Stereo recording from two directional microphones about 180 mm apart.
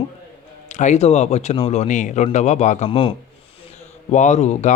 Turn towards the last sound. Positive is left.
turn(degrees=40)  # may be behind; listen again after turning